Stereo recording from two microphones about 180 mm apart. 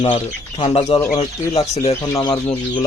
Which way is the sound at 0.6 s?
35° left (ahead or behind).